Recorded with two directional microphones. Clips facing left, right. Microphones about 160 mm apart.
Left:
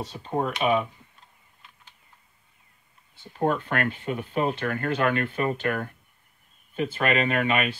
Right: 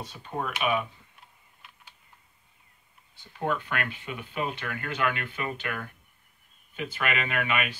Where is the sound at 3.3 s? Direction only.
35° left (ahead or behind).